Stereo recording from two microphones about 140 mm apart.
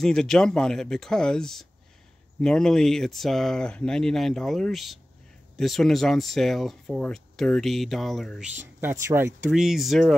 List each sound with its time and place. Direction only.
0.0 s speech: 5° left (ahead or behind)
9.0 s speech: 15° right (ahead or behind)
9.5 s speech: 5° right (ahead or behind)